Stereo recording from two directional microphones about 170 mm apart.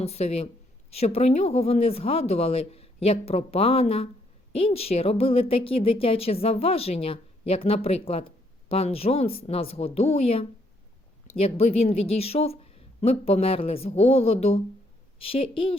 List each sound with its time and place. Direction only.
0.0 s speech: 35° left (ahead or behind)